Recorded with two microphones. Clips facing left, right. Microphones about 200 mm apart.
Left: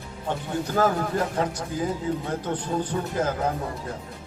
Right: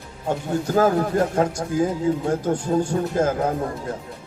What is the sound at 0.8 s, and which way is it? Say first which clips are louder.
Speech: right 5 dB; 45° right (ahead or behind).